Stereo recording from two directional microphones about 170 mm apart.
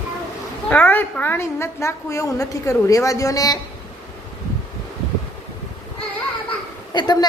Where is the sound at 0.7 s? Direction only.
10° left (ahead or behind).